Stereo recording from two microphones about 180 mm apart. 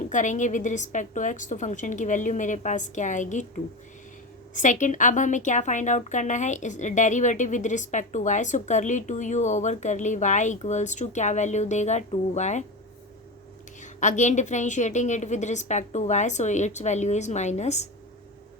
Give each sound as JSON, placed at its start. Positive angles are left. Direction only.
{"t": 0.1, "sound": "speech", "side_deg": 45}
{"t": 4.5, "sound": "speech", "side_deg": 45}
{"t": 14.0, "sound": "a woman's voice", "side_deg": 40}